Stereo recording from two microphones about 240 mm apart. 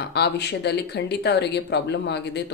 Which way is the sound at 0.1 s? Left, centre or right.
Left.